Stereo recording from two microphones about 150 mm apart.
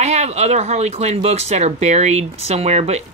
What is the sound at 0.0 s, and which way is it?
Speech, 45° right (ahead or behind).